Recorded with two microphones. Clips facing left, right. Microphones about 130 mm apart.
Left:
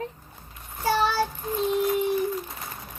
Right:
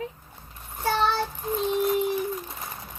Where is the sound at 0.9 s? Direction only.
5° left (ahead or behind).